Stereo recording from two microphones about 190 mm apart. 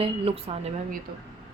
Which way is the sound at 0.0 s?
30° right (ahead or behind).